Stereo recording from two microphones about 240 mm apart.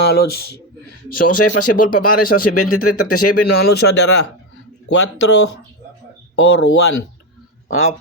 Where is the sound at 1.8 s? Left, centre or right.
Left.